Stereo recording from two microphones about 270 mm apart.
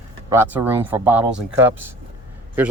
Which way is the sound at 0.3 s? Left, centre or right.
Centre.